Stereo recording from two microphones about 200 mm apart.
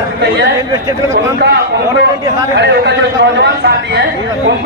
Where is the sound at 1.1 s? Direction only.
60° right (ahead or behind).